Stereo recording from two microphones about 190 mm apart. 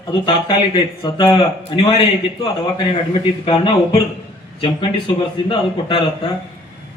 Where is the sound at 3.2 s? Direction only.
25° left (ahead or behind).